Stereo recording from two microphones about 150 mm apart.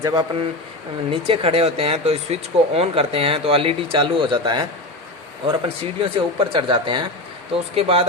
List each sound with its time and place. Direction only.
0.0 s speech: 25° right (ahead or behind)
1.1 s speech: 40° right (ahead or behind)